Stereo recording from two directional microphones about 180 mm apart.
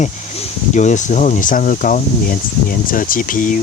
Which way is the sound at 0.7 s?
40° left (ahead or behind).